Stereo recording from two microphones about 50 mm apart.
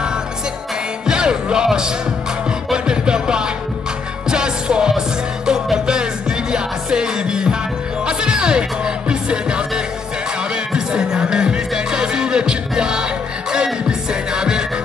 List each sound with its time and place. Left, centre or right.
1.0 s music: centre